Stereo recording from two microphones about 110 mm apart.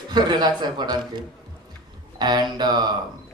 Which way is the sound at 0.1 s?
40° right (ahead or behind).